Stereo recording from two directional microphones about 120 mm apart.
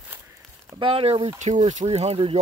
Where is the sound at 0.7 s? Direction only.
50° right (ahead or behind).